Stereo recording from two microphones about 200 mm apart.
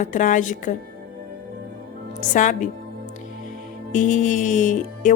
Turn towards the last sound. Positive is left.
turn(degrees=40)  # may be behind; listen again after turning